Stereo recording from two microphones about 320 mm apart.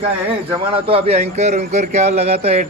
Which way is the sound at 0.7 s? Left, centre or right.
Centre.